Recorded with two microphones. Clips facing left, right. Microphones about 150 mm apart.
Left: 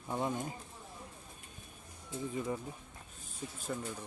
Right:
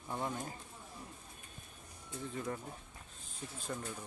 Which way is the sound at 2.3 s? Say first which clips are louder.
Left 3 dB; 10° left (ahead or behind).